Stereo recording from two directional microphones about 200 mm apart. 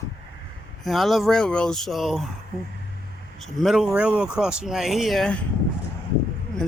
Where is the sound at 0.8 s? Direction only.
Centre (ahead or behind).